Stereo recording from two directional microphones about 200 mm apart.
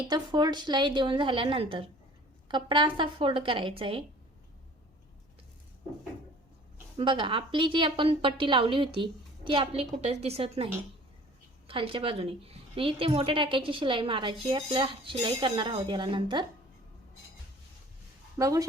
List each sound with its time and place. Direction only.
0.0 s a woman's voice: 20° right (ahead or behind)
6.9 s a woman's voice: 25° right (ahead or behind)
11.7 s a woman's voice: 25° right (ahead or behind)
18.3 s speech: 15° right (ahead or behind)